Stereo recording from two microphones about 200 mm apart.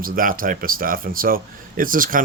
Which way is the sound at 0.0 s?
45° right (ahead or behind).